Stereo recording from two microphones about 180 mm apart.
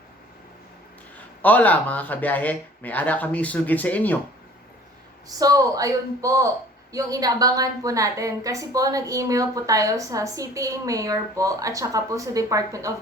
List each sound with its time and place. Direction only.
1.4 s speech: 10° left (ahead or behind)
5.4 s a woman's voice: 20° right (ahead or behind)